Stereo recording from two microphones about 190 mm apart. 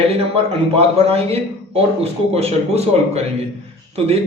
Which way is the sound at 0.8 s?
30° right (ahead or behind).